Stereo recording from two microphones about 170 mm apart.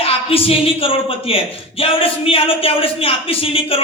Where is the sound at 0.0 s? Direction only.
35° left (ahead or behind).